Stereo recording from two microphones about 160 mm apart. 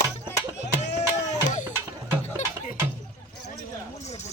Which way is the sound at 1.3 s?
50° left (ahead or behind).